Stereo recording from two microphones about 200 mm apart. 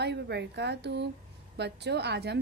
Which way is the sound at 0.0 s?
55° right (ahead or behind).